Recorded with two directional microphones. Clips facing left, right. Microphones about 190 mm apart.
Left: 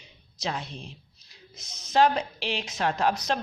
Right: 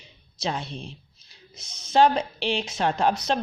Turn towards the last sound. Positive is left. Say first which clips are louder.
# right 2 dB
turn(degrees=-25)  # may be behind; listen again after turning